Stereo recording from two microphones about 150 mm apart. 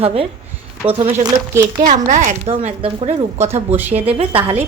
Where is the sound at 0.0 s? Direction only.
40° right (ahead or behind).